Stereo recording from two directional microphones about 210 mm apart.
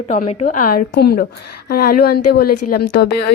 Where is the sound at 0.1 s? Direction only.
30° left (ahead or behind).